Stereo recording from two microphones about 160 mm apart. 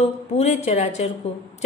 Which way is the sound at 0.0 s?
45° left (ahead or behind).